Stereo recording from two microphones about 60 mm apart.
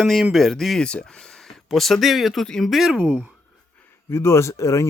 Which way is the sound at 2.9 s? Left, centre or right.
Centre.